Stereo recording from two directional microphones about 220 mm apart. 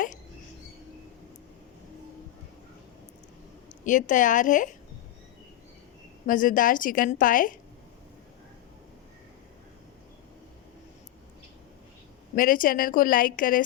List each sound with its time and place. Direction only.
3.8 s a woman's voice: 35° left (ahead or behind)
6.2 s a woman's voice: 35° left (ahead or behind)
12.4 s a woman's voice: 40° left (ahead or behind)